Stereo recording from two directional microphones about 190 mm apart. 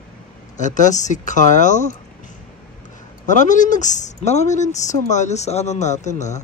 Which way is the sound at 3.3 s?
40° left (ahead or behind).